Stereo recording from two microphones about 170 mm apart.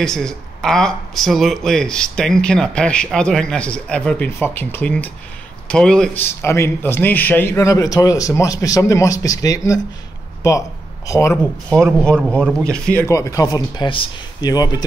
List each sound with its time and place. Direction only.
0.0 s speech: 5° left (ahead or behind)
12.3 s speech: 5° left (ahead or behind); by 14.9 s 25° left (ahead or behind)